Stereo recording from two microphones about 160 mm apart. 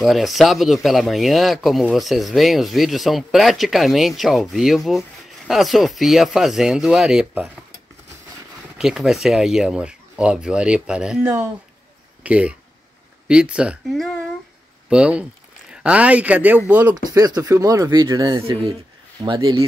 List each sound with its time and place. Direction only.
0.0 s speech: centre (ahead or behind)
8.7 s speech: 5° right (ahead or behind)
16.9 s speech: 25° right (ahead or behind)